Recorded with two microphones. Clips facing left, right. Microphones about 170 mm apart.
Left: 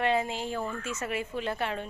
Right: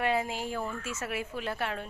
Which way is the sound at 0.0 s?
5° right (ahead or behind).